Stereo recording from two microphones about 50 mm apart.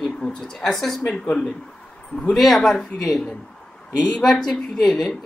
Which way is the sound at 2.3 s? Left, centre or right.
Centre.